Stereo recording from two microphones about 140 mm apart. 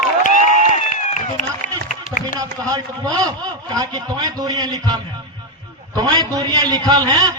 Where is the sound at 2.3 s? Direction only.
25° right (ahead or behind).